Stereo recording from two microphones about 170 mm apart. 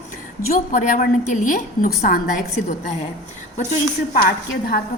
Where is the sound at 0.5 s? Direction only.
50° left (ahead or behind).